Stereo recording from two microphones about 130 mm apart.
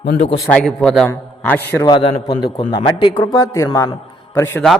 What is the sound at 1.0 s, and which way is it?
Speech, 15° left (ahead or behind).